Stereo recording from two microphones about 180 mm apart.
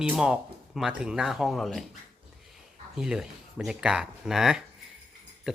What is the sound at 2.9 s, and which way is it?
Speech, 5° right (ahead or behind).